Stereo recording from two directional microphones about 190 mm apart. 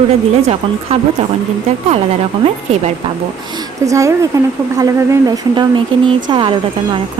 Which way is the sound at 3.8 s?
15° right (ahead or behind).